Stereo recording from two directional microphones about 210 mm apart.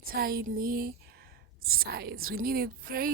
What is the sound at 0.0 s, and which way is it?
Speech, 45° right (ahead or behind).